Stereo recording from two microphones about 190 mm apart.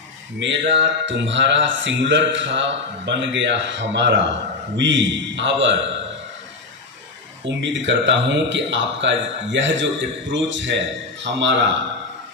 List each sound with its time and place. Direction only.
0.4 s speech: 70° right (ahead or behind)
7.4 s speech: 70° right (ahead or behind)